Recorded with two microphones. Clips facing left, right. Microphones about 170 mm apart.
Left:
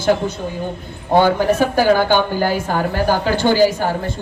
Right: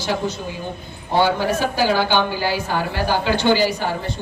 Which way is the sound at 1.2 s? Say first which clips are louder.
Left 2 dB; 55° left (ahead or behind).